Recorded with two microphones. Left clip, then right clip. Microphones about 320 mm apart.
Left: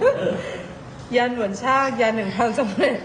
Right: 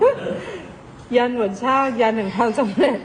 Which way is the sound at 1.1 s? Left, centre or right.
Centre.